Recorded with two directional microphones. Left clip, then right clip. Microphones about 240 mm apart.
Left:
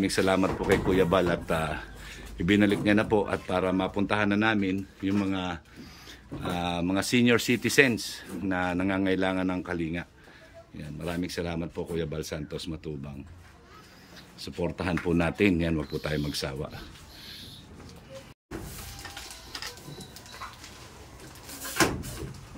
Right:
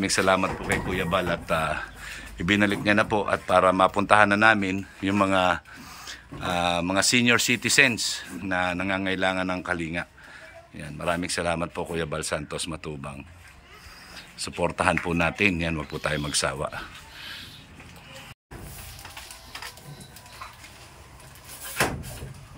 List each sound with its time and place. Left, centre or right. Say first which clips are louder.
0.0 s a man's voice: right 3 dB; centre
0.7 s a man's voice: left 3 dB; left
14.1 s a man's voice: right 4 dB; centre